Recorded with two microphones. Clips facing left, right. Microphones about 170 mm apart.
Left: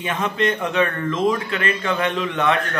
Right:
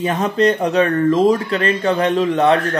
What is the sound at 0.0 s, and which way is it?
Speech, 40° right (ahead or behind).